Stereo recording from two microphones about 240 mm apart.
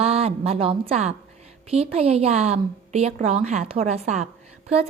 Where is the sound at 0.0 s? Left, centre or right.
Right.